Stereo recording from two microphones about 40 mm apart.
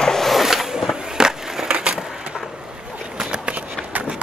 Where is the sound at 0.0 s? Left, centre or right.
Centre.